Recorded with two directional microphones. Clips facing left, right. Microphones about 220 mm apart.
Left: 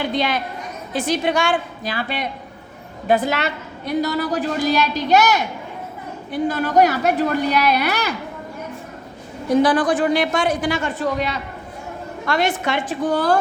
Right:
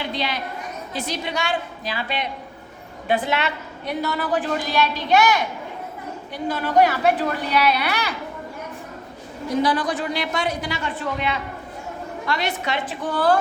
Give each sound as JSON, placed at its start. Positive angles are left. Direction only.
{"t": 0.0, "sound": "a man's voice", "side_deg": 50}
{"t": 6.5, "sound": "a man's voice", "side_deg": 45}
{"t": 9.6, "sound": "a man's voice", "side_deg": 50}